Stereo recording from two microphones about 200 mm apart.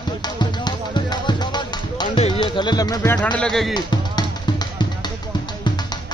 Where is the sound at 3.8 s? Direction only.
20° left (ahead or behind).